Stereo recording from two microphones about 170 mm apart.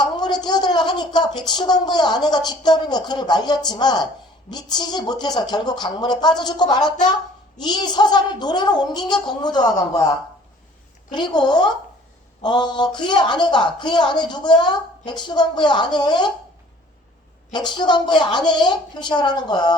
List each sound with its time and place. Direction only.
0.0 s a woman's voice: 25° left (ahead or behind)
11.1 s speech: 25° left (ahead or behind)
17.7 s speech: 25° left (ahead or behind)